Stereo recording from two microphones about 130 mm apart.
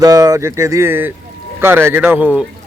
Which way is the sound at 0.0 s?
25° right (ahead or behind).